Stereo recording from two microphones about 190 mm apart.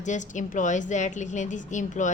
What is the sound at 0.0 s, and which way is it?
A woman's voice, 40° left (ahead or behind).